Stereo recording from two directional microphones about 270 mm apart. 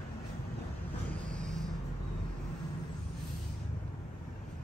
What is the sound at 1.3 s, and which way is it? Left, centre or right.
Vehicle, centre.